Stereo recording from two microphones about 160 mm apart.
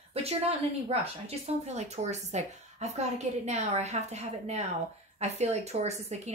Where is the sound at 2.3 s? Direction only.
45° right (ahead or behind).